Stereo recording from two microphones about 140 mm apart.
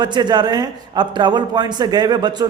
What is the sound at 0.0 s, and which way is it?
A man's voice, 30° right (ahead or behind).